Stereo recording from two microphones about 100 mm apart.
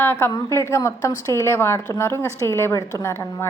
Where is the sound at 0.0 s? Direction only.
25° left (ahead or behind).